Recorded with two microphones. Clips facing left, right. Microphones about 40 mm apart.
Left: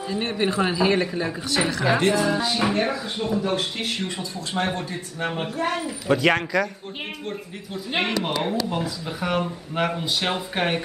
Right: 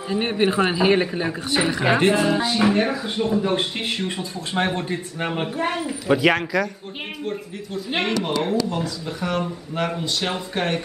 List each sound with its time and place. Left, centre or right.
0.1 s speech: right
2.4 s a woman's voice: centre
4.2 s a woman's voice: right; by 10.8 s centre